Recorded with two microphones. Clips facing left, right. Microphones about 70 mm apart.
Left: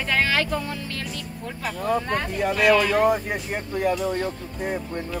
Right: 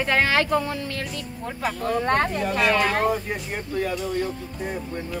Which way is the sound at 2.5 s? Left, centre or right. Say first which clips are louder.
Left 5 dB; right.